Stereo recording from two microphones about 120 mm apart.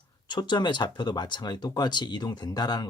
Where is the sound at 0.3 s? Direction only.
40° left (ahead or behind).